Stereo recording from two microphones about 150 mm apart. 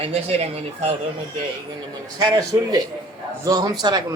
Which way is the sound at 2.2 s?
25° right (ahead or behind).